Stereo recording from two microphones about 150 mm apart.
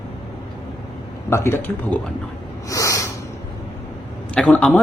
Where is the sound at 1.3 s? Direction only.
15° left (ahead or behind).